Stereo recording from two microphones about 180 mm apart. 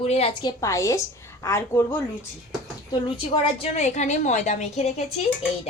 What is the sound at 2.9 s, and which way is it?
A woman's voice, 30° left (ahead or behind).